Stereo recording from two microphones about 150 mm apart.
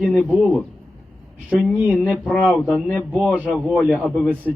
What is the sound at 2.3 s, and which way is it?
A man's voice, 5° left (ahead or behind).